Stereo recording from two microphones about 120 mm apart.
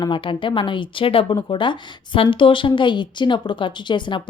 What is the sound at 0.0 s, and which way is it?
A woman's voice, 45° left (ahead or behind).